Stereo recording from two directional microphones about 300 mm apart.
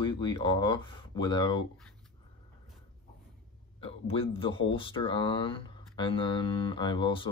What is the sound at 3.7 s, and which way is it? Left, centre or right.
Speech, centre.